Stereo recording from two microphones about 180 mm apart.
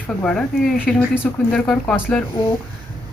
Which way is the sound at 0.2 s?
5° left (ahead or behind).